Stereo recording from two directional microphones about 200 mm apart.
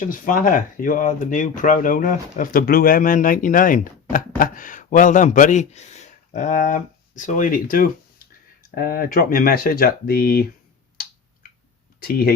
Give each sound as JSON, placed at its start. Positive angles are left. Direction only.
{"t": 0.0, "sound": "speech", "side_deg": 45}
{"t": 11.9, "sound": "speech", "side_deg": 50}